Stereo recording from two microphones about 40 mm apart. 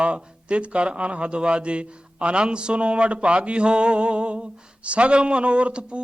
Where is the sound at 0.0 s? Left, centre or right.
Right.